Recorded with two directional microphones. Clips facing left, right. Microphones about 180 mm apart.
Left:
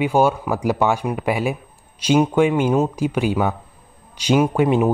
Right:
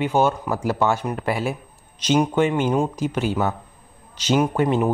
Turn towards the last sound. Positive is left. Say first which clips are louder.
# left 3 dB
turn(degrees=10)  # may be behind; listen again after turning